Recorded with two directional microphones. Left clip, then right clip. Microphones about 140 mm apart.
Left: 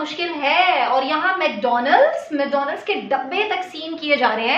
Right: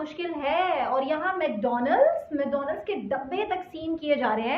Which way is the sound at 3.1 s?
15° left (ahead or behind).